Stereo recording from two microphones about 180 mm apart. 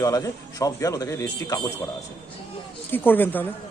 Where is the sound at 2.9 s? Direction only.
10° left (ahead or behind).